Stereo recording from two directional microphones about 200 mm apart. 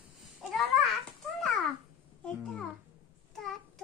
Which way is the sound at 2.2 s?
Centre (ahead or behind).